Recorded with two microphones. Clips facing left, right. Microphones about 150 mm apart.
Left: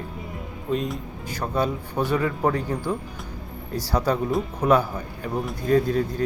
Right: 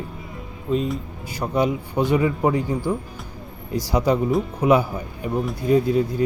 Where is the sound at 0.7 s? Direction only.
Centre (ahead or behind).